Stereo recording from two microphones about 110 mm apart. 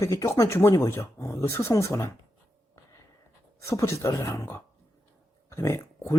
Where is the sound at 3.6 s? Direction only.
25° left (ahead or behind).